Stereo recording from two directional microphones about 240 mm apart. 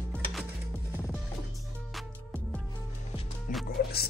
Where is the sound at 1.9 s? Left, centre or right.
Centre.